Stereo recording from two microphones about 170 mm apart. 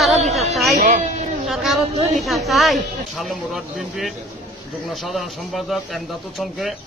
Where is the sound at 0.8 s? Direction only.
50° right (ahead or behind).